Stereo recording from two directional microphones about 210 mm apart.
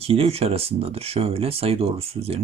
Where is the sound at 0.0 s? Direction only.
30° right (ahead or behind).